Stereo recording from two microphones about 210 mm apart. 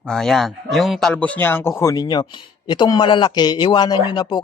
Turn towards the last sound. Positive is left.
turn(degrees=20)  # may be behind; listen again after turning